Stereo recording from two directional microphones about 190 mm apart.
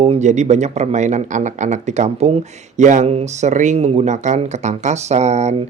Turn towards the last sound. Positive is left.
turn(degrees=-35)  # may be behind; listen again after turning